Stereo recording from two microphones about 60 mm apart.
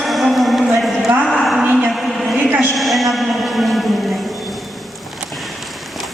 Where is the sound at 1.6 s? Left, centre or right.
Right.